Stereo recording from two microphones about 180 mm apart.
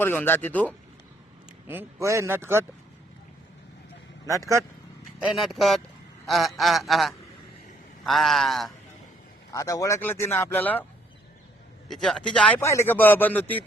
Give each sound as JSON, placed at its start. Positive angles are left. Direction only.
{"t": 0.0, "sound": "speech", "side_deg": 10}
{"t": 1.6, "sound": "a man's voice", "side_deg": -10}
{"t": 4.3, "sound": "a man's voice", "side_deg": -15}
{"t": 5.2, "sound": "speech", "side_deg": 0}
{"t": 6.2, "sound": "a sound", "side_deg": 0}
{"t": 6.6, "sound": "speech", "side_deg": 0}
{"t": 9.5, "sound": "speech", "side_deg": 20}
{"t": 11.9, "sound": "speech", "side_deg": 0}